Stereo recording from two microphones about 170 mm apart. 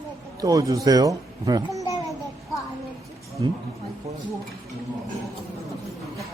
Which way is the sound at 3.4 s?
25° right (ahead or behind).